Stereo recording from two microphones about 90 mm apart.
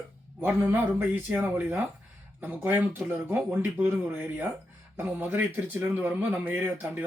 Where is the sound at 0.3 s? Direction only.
20° right (ahead or behind).